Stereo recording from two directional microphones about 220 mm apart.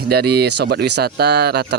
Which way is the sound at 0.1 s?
45° right (ahead or behind).